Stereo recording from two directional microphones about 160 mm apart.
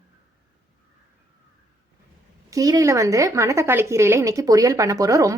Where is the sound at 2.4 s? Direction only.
20° right (ahead or behind).